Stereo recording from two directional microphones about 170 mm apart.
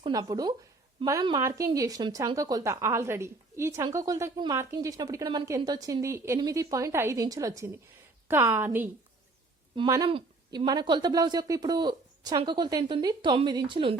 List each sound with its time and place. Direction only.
0.0 s a woman's voice: 25° right (ahead or behind)
9.7 s a woman's voice: 25° right (ahead or behind)